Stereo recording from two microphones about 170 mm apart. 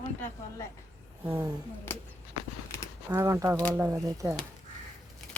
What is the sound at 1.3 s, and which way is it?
Speech, 10° right (ahead or behind).